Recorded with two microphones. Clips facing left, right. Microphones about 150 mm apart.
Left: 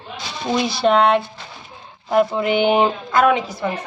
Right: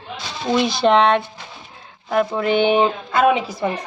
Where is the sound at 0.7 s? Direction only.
5° left (ahead or behind).